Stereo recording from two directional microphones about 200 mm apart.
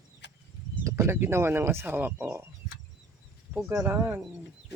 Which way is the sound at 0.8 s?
15° right (ahead or behind).